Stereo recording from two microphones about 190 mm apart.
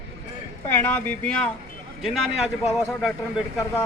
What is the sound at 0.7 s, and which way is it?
Speech, 10° left (ahead or behind).